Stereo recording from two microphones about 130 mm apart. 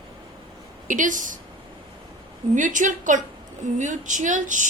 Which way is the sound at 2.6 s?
80° right.